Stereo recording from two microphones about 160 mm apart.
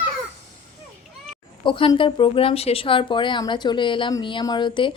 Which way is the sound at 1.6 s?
30° left (ahead or behind).